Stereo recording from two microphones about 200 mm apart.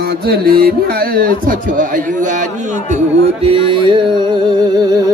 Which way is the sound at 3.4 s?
25° right (ahead or behind).